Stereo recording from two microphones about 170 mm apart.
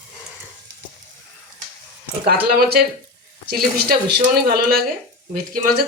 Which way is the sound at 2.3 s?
65° right (ahead or behind).